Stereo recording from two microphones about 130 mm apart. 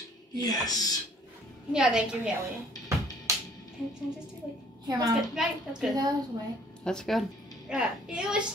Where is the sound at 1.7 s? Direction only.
5° right (ahead or behind).